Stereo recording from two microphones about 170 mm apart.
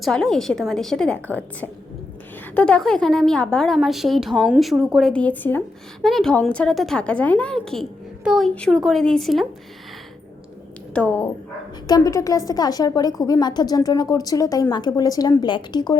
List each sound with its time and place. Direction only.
0.0 s a woman's voice: 5° left (ahead or behind)
10.9 s speech: 10° left (ahead or behind)
11.9 s a woman's voice: 20° left (ahead or behind)